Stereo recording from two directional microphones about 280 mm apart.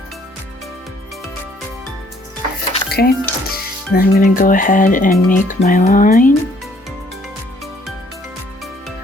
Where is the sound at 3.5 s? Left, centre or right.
Left.